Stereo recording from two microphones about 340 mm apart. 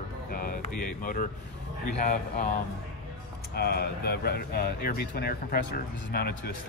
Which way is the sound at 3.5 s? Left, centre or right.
Left.